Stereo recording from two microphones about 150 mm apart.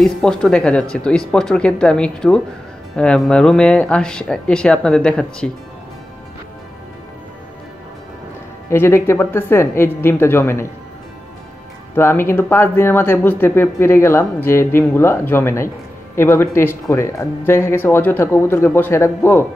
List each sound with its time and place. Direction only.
0.0 s speech: 5° left (ahead or behind)
8.6 s speech: 15° left (ahead or behind)
11.9 s speech: 15° left (ahead or behind)